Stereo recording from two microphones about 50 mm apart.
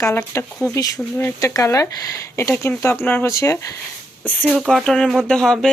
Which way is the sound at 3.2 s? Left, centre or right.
Left.